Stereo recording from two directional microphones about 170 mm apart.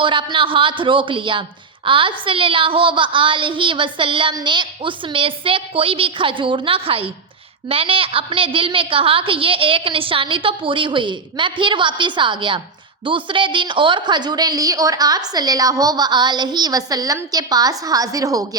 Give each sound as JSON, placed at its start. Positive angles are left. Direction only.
{"t": 0.0, "sound": "a man's voice", "side_deg": -30}